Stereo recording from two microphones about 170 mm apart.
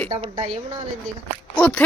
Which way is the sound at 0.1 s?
35° right (ahead or behind).